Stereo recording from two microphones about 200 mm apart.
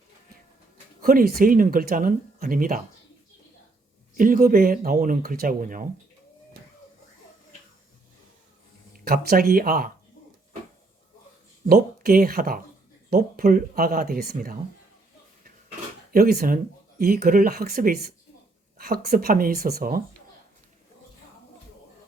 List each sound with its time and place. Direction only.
1.0 s speech: 50° right (ahead or behind)
4.2 s speech: 45° right (ahead or behind)
9.0 s speech: 50° right (ahead or behind)
11.6 s speech: 45° right (ahead or behind)
16.1 s speech: 50° right (ahead or behind)